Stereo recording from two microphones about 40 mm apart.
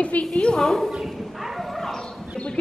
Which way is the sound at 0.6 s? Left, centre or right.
Centre.